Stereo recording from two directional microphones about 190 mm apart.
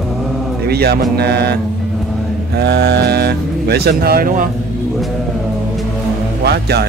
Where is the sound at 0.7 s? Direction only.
55° right (ahead or behind).